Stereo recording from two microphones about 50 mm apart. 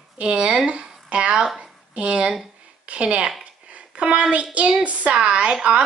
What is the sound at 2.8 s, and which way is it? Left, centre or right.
Speech, right.